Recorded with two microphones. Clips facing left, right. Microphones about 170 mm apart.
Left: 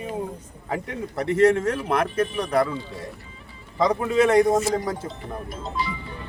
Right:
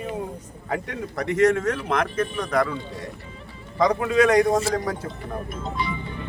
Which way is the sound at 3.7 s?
25° left (ahead or behind).